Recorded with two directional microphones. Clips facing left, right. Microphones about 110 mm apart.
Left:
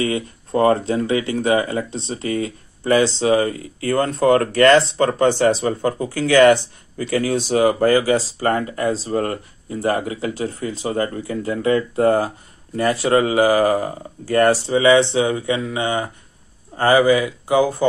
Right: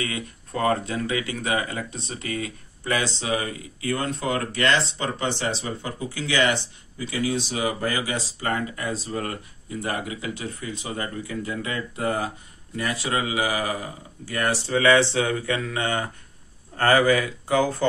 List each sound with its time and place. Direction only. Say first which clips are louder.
0.0 s speech: left 9 dB; 30° left (ahead or behind)
14.7 s speech: left 5 dB; 20° left (ahead or behind)